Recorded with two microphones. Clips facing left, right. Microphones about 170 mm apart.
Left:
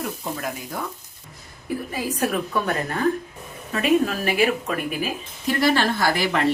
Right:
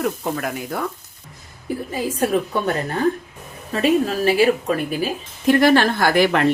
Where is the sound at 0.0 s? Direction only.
65° right (ahead or behind).